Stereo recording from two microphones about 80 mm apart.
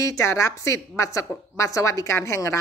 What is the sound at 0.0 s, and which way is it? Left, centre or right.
A woman's voice, left.